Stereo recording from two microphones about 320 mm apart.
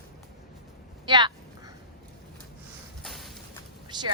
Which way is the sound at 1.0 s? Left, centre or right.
Centre.